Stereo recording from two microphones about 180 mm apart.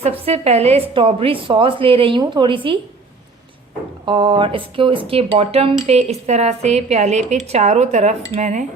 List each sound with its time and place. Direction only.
0.0 s a woman's voice: 35° right (ahead or behind)
4.0 s a woman's voice: 25° right (ahead or behind)